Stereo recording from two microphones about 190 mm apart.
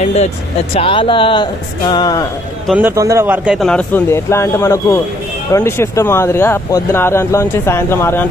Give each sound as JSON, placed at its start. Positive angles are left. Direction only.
{"t": 0.0, "sound": "speech", "side_deg": 35}
{"t": 2.6, "sound": "speech", "side_deg": -10}